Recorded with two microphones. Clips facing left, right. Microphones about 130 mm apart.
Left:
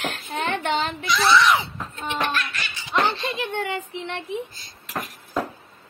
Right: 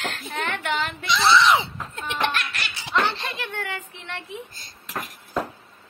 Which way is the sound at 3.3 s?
20° left (ahead or behind).